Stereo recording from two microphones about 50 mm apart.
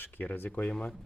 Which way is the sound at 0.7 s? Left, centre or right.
Centre.